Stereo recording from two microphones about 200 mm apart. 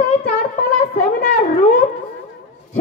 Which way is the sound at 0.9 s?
40° left (ahead or behind).